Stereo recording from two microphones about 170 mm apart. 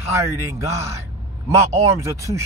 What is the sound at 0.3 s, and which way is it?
Speech, 15° right (ahead or behind).